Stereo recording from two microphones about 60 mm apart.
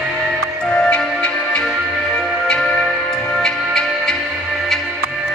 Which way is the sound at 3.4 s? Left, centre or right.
Centre.